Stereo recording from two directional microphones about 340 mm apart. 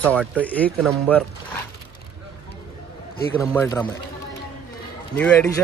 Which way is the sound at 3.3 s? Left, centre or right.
Centre.